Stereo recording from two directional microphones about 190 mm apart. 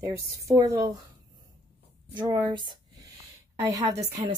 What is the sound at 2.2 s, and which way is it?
Speech, 25° right (ahead or behind).